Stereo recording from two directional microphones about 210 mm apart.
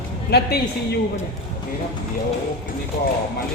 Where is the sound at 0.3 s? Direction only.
50° left (ahead or behind).